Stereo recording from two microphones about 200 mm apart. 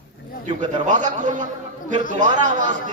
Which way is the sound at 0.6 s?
40° right (ahead or behind).